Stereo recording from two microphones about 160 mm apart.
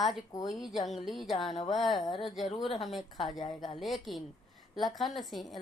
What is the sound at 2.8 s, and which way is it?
A woman's voice, centre (ahead or behind).